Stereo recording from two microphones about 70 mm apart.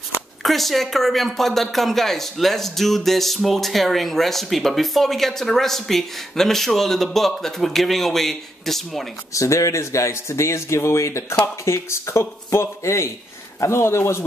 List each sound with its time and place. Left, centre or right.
0.4 s speech: centre
9.3 s speech: left